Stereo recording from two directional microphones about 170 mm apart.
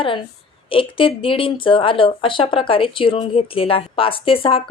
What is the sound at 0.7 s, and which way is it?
Speech, 30° left (ahead or behind).